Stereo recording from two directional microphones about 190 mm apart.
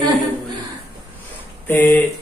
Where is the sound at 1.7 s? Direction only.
10° left (ahead or behind).